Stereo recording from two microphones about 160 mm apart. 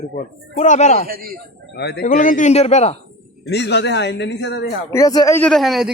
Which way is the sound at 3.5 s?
90° left.